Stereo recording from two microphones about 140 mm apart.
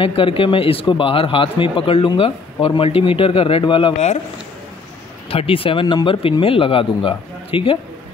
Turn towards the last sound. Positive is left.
turn(degrees=40)  # may be behind; listen again after turning